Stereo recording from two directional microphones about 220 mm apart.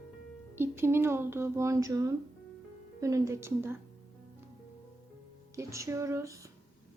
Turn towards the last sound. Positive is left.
turn(degrees=-15)  # may be behind; listen again after turning